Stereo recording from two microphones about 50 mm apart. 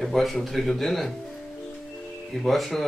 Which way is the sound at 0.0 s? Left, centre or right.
Centre.